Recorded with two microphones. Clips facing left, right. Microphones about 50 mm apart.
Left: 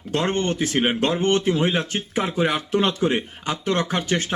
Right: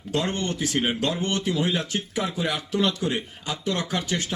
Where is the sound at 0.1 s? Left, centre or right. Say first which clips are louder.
Left 4 dB; left.